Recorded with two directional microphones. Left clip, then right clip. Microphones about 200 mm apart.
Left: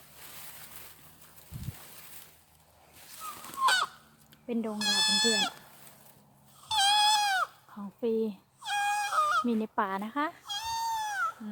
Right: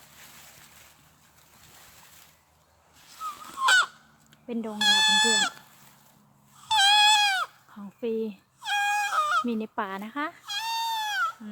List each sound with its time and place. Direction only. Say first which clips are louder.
3.2 s goose: right 7 dB; 25° left (ahead or behind)
3.6 s fowl: right 5 dB; 45° right (ahead or behind)
4.4 s speech: even; centre (ahead or behind)
4.7 s speech: right 7 dB; 35° right (ahead or behind)
6.7 s goat: right 5 dB; 35° right (ahead or behind)
7.8 s a sound: even; centre (ahead or behind)
8.6 s wail: right 4 dB; 35° right (ahead or behind)
9.5 s speech: left 1 dB; centre (ahead or behind)
10.4 s a sound: right 4 dB; 35° right (ahead or behind)